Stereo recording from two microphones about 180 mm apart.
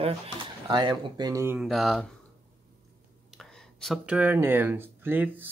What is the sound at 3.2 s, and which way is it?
Speech, centre (ahead or behind).